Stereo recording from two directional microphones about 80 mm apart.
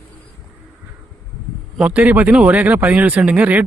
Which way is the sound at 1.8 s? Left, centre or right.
Centre.